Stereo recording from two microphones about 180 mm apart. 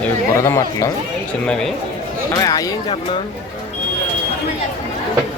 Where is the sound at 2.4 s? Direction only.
20° left (ahead or behind).